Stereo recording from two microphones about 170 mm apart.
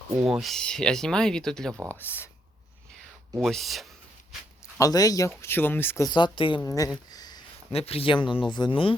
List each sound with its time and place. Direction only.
0.3 s speech: centre (ahead or behind)
3.3 s speech: centre (ahead or behind)
4.8 s speech: 20° left (ahead or behind)
6.1 s speech: 25° left (ahead or behind)
6.6 s speech: 20° left (ahead or behind)
7.1 s a sound: 25° left (ahead or behind)
7.8 s speech: 35° left (ahead or behind)